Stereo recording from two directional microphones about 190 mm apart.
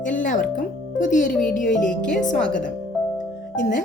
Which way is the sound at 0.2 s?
45° left (ahead or behind).